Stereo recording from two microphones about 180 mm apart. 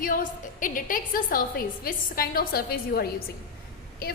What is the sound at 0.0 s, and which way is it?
A woman's voice, 50° left (ahead or behind).